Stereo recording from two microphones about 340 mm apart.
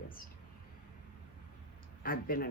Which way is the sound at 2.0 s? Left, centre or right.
Left.